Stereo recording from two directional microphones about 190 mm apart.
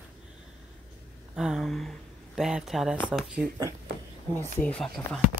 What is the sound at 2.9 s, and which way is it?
Speech, 10° left (ahead or behind).